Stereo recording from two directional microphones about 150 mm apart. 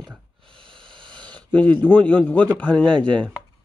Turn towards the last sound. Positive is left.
turn(degrees=10)  # may be behind; listen again after turning